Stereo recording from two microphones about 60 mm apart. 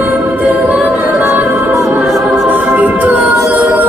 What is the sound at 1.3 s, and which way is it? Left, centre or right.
Music, right.